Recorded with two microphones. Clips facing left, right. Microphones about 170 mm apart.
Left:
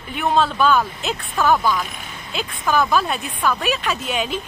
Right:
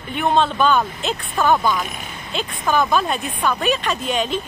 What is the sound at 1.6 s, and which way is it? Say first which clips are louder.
Speech: even; 20° right (ahead or behind).